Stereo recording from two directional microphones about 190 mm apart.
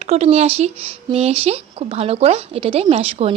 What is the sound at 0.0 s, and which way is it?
Speech, 35° right (ahead or behind).